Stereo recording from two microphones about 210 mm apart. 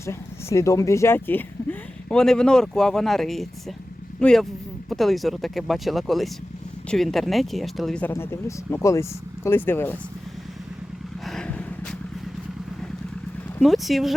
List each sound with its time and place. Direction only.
0.0 s speech: 15° left (ahead or behind)
11.3 s vehicle: 5° left (ahead or behind)
13.6 s speech: centre (ahead or behind)